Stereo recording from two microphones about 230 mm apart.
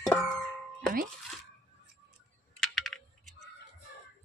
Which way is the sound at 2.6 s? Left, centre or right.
Centre.